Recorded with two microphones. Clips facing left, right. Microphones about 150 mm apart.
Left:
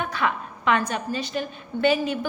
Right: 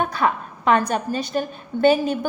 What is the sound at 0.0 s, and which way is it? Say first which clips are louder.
A woman's voice: right 4 dB; 40° right (ahead or behind).